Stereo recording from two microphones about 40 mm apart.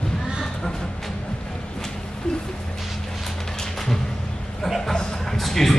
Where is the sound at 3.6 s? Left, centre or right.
Centre.